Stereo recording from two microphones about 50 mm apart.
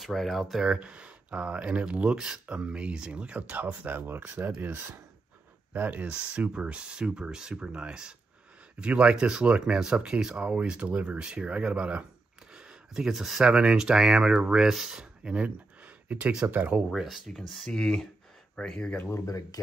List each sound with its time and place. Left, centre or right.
0.0 s speech: centre
0.7 s speech: right
3.8 s speech: right
5.7 s speech: right; by 15.4 s centre
15.4 s a sound: right
16.4 s speech: right
16.9 s speech: centre
17.6 s speech: centre
18.9 s speech: left